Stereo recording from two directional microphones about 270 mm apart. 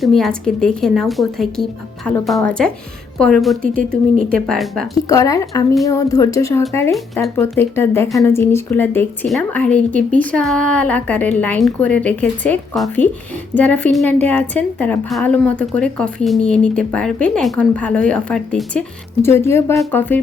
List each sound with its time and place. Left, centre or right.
0.0 s a woman's voice: centre
3.6 s speech: right
4.3 s a woman's voice: centre
4.9 s a woman's voice: centre